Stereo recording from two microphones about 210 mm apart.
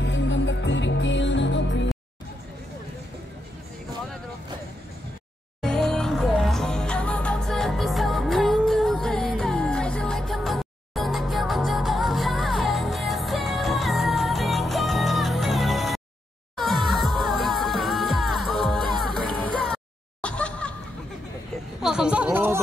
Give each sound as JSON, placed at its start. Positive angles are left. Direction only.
{"t": 0.0, "sound": "music", "side_deg": 60}
{"t": 5.6, "sound": "music", "side_deg": 0}
{"t": 21.8, "sound": "a sound", "side_deg": -5}